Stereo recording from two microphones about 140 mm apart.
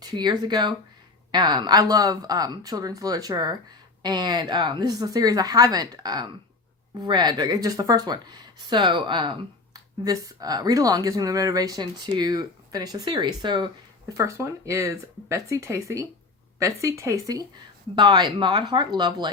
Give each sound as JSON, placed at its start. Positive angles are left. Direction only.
{"t": 0.0, "sound": "speech", "side_deg": -30}
{"t": 14.2, "sound": "speech", "side_deg": -20}